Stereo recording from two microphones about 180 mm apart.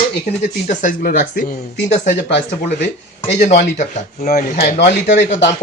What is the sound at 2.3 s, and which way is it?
Speech, 80° left.